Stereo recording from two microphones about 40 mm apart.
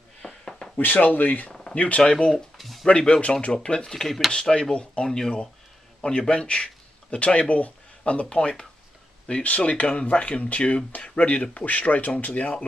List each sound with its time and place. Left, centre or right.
0.2 s a sound: centre
0.7 s speech: left
1.5 s a sound: centre
1.8 s speech: left
2.5 s a sound: centre
2.9 s speech: left
3.9 s speech: centre
4.3 s speech: left
5.0 s speech: centre
9.6 s speech: left